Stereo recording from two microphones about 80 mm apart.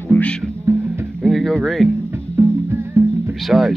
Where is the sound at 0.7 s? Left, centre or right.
Right.